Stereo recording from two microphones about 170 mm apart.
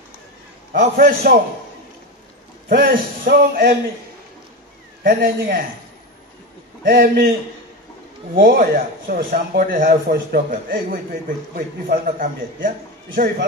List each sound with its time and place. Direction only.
1.0 s a man's voice: 50° right (ahead or behind)
2.8 s speech: 60° right (ahead or behind)
5.0 s speech: 55° right (ahead or behind)
6.8 s speech: 60° right (ahead or behind)
8.4 s speech: 55° right (ahead or behind)